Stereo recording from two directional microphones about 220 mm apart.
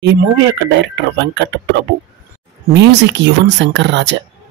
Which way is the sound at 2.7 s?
50° right (ahead or behind).